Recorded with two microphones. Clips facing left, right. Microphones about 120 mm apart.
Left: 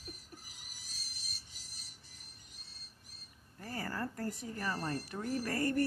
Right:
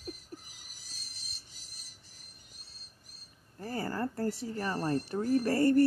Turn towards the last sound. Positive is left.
turn(degrees=-30)  # may be behind; listen again after turning